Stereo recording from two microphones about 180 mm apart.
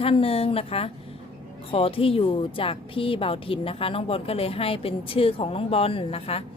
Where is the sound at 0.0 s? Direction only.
30° left (ahead or behind).